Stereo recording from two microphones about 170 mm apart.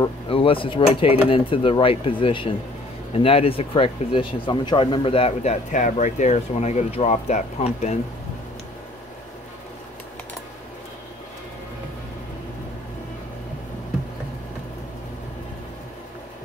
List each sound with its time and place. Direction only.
0.0 s speech: 30° left (ahead or behind)